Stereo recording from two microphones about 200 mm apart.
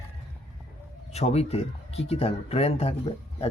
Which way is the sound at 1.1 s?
30° left (ahead or behind).